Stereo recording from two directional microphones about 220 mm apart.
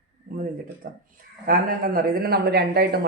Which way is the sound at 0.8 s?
40° right (ahead or behind).